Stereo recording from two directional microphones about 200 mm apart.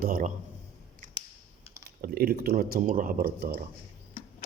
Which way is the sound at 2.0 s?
50° right (ahead or behind).